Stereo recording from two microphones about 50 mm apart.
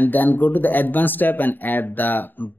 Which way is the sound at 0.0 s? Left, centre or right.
Left.